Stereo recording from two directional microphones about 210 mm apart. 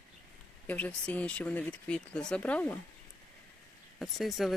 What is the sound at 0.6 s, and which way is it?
Speech, 5° left (ahead or behind).